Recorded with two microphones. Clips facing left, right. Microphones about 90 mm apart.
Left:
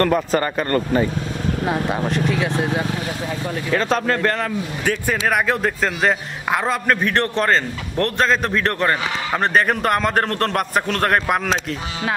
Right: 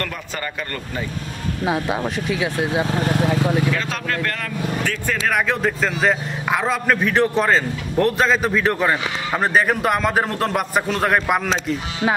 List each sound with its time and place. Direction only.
0.0 s speech: 40° left (ahead or behind)
1.7 s a man's voice: 5° right (ahead or behind)
3.0 s speech: 60° right (ahead or behind)
3.7 s speech: 35° left (ahead or behind)
5.3 s a man's voice: centre (ahead or behind)